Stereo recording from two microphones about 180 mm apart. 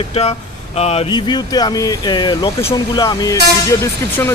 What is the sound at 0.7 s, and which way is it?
Speech, 35° left (ahead or behind).